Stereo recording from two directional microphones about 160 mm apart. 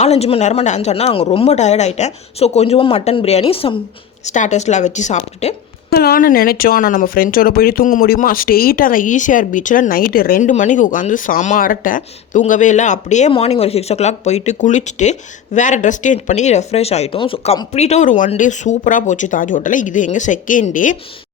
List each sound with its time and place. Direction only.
0.0 s speech: 40° left (ahead or behind)
4.3 s speech: 45° left (ahead or behind)
5.9 s speech: 75° left (ahead or behind); by 20.9 s 55° left (ahead or behind)